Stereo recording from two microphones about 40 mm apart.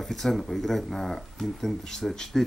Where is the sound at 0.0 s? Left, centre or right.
Centre.